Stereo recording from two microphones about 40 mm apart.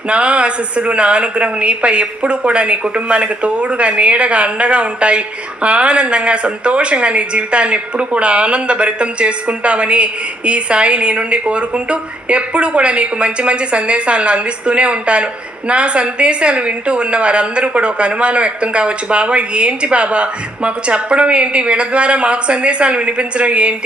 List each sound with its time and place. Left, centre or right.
0.1 s a woman's voice: right